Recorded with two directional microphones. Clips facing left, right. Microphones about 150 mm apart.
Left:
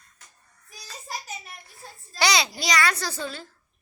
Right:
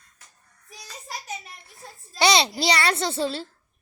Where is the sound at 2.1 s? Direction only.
25° right (ahead or behind).